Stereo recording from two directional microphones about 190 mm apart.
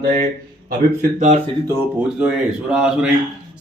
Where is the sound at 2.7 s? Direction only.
5° right (ahead or behind).